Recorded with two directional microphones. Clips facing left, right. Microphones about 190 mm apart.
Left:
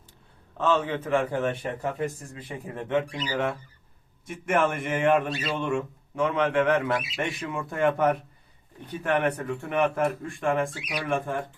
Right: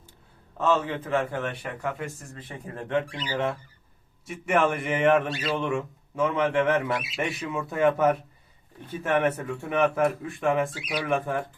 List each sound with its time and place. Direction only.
0.5 s a man's voice: centre (ahead or behind)
1.1 s speech: 20° left (ahead or behind)
4.3 s speech: centre (ahead or behind)
9.2 s speech: 5° right (ahead or behind)